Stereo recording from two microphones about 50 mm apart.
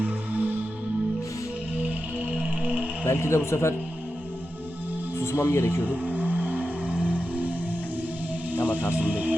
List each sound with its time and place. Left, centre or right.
0.0 s music: right
1.8 s music: right
3.1 s a man's voice: left
5.2 s speech: left
5.8 s vehicle: right
6.9 s music: right
9.0 s music: right